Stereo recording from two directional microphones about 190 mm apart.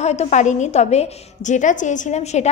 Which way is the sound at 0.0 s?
35° left (ahead or behind).